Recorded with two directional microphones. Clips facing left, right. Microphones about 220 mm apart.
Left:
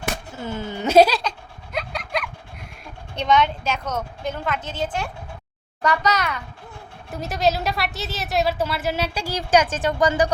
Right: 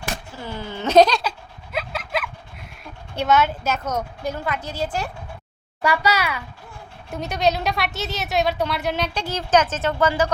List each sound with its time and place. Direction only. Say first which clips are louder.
0.3 s speech: left 2 dB; 20° left (ahead or behind)
1.2 s a sound: right 1 dB; 5° right (ahead or behind)
3.2 s a woman's voice: even; 5° right (ahead or behind); by 10.3 s 15° left (ahead or behind)